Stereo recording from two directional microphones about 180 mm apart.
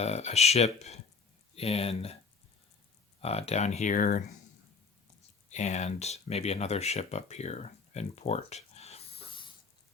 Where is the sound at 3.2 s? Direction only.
35° left (ahead or behind).